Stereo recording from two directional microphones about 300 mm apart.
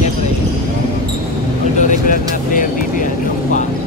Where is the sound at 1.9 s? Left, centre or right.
Left.